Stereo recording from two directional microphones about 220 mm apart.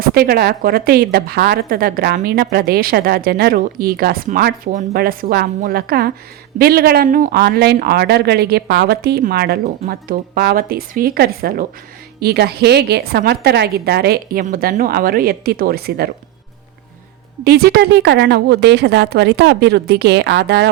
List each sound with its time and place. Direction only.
0.0 s a woman's voice: 45° right (ahead or behind)
17.4 s a woman's voice: 45° right (ahead or behind)